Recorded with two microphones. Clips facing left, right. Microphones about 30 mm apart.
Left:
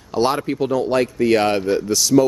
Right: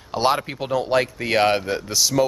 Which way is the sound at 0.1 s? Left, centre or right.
Centre.